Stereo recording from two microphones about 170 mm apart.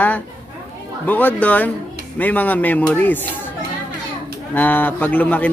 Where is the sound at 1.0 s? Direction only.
10° left (ahead or behind).